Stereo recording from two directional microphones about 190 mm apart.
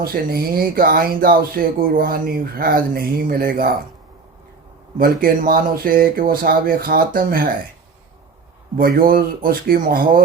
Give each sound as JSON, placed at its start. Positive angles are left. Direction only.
{"t": 0.0, "sound": "speech", "side_deg": -50}
{"t": 4.9, "sound": "speech", "side_deg": -50}
{"t": 8.8, "sound": "speech", "side_deg": -50}